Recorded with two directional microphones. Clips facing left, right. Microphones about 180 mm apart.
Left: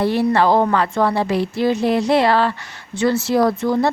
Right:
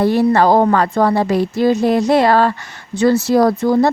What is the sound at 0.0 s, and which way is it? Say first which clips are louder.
A woman's voice: right 4 dB; 45° right (ahead or behind).